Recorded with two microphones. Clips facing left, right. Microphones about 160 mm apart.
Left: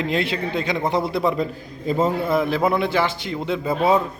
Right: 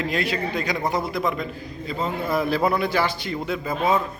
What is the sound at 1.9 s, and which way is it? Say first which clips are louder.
Speech: left 8 dB; 45° left (ahead or behind).